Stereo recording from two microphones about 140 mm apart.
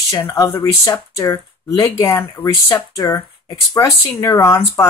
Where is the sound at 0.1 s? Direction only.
25° left (ahead or behind).